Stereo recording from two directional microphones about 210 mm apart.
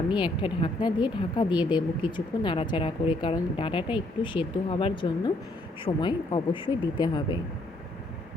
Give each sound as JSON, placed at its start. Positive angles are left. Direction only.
{"t": 0.1, "sound": "speech", "side_deg": 25}